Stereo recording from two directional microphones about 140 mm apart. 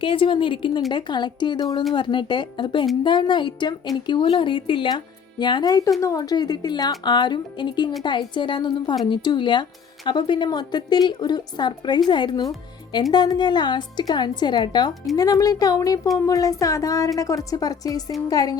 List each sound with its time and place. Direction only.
0.0 s a woman's voice: 40° left (ahead or behind)